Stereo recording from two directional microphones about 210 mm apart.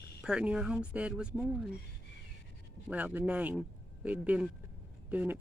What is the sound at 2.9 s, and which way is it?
Speech, 10° right (ahead or behind).